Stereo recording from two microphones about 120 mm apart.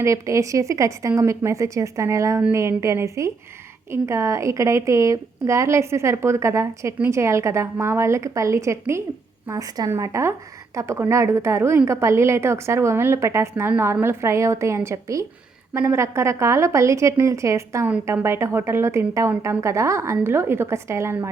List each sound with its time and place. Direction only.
0.0 s a woman's voice: 25° right (ahead or behind)